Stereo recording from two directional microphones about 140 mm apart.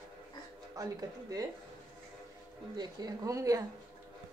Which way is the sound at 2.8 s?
25° right (ahead or behind).